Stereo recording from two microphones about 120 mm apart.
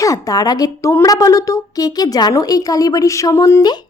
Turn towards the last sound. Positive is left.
turn(degrees=30)  # may be behind; listen again after turning